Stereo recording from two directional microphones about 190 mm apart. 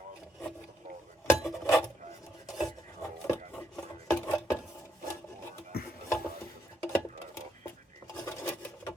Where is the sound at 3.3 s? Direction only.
10° left (ahead or behind).